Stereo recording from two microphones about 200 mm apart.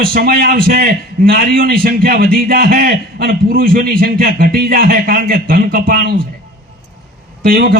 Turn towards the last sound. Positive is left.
turn(degrees=-50)  # may be behind; listen again after turning